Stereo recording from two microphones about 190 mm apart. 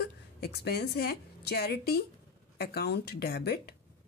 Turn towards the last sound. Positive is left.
turn(degrees=55)  # may be behind; listen again after turning